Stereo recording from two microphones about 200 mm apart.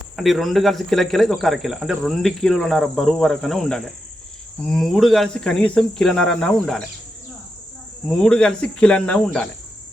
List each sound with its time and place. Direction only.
0.2 s speech: centre (ahead or behind)
8.0 s speech: 5° left (ahead or behind)